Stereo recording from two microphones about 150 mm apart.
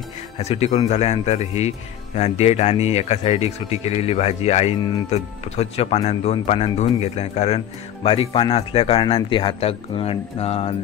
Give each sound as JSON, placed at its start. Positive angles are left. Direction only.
{"t": 0.4, "sound": "speech", "side_deg": 45}